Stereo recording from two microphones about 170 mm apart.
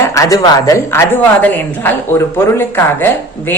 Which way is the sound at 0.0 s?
15° left (ahead or behind).